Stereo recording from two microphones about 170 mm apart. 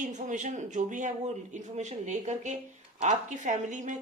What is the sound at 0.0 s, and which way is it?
A woman's voice, 45° right (ahead or behind).